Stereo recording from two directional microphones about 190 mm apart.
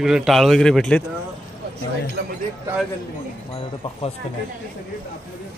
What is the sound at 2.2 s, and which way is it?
Speech, 50° right (ahead or behind).